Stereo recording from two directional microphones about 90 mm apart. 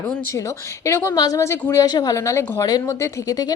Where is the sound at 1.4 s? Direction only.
30° left (ahead or behind).